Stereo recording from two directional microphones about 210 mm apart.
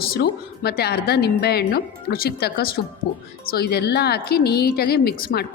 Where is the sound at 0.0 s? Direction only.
45° left (ahead or behind).